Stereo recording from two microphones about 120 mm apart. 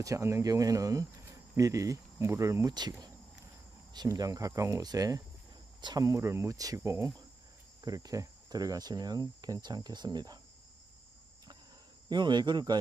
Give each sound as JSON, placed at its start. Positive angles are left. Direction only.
{"t": 0.0, "sound": "speech", "side_deg": -25}
{"t": 3.9, "sound": "speech", "side_deg": -35}
{"t": 7.8, "sound": "cricket", "side_deg": -30}
{"t": 12.1, "sound": "cricket", "side_deg": -40}